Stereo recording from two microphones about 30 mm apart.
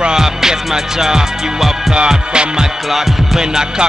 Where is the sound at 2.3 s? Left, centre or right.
Right.